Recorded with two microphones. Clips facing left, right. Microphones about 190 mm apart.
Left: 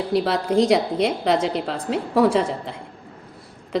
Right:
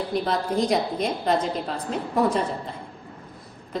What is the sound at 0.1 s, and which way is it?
A woman's voice, 90° left.